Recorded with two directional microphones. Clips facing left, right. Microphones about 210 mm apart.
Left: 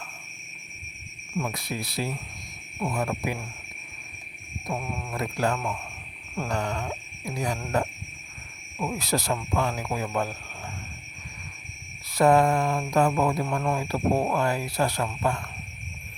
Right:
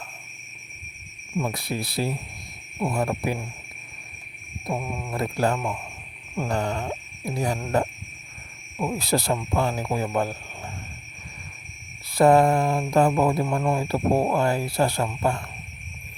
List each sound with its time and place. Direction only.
1.4 s wail: 30° right (ahead or behind)
4.8 s speech: 15° right (ahead or behind)
5.1 s wail: 30° right (ahead or behind)
5.5 s speech: 15° right (ahead or behind)
6.5 s wail: 30° right (ahead or behind)
8.8 s speech: 30° right (ahead or behind)
12.1 s wail: 30° right (ahead or behind)
12.9 s speech: 30° right (ahead or behind)